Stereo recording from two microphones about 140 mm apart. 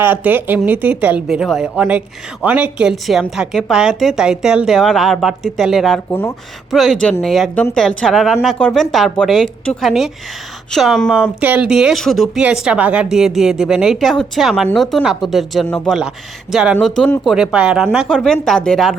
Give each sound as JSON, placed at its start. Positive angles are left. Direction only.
{"t": 0.0, "sound": "a woman's voice", "side_deg": -15}
{"t": 6.1, "sound": "speech", "side_deg": 15}
{"t": 6.7, "sound": "a woman's voice", "side_deg": 0}